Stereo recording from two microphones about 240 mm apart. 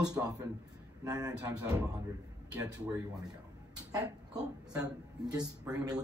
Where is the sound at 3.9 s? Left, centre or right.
Centre.